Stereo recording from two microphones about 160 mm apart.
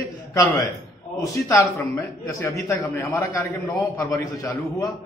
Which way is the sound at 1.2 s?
20° left (ahead or behind).